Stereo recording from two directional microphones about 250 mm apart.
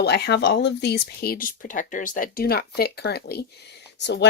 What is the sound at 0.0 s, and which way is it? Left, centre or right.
Speech, left.